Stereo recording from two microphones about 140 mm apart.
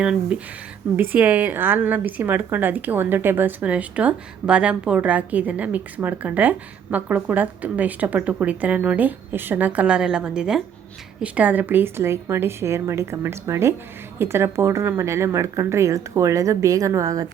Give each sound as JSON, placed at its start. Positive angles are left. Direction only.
{"t": 0.0, "sound": "a woman's voice", "side_deg": -5}